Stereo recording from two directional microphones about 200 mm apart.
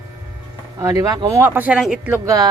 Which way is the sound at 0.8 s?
20° right (ahead or behind).